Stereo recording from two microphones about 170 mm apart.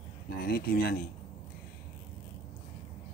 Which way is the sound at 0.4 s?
60° left (ahead or behind).